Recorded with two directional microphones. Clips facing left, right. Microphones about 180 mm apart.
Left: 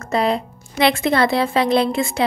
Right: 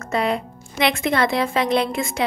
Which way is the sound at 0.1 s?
35° left (ahead or behind).